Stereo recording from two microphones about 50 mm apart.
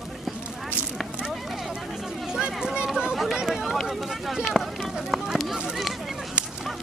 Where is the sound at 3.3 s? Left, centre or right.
Centre.